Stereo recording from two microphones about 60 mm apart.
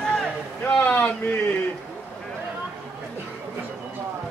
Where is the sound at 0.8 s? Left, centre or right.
Left.